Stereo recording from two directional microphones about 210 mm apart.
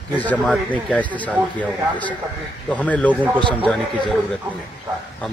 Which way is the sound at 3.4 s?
25° right (ahead or behind).